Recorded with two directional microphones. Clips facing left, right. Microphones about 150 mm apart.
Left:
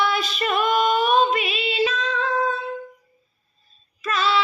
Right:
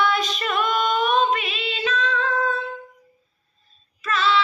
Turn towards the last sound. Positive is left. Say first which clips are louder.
# right 1 dB
turn(degrees=10)  # may be behind; listen again after turning